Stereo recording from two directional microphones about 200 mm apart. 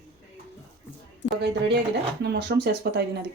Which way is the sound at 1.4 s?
60° right (ahead or behind).